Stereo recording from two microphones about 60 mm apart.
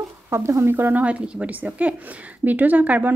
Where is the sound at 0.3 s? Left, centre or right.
Right.